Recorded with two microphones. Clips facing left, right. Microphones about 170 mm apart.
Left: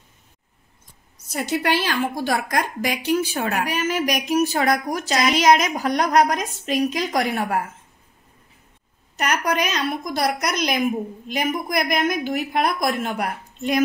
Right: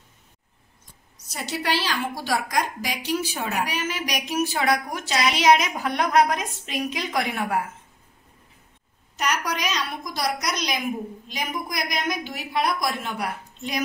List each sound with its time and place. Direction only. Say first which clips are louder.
1.3 s a woman's voice: left 5 dB; 50° left (ahead or behind)
9.1 s a woman's voice: left 4 dB; 55° left (ahead or behind)